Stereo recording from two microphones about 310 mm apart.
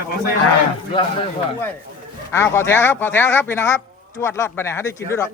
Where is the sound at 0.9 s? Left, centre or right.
Centre.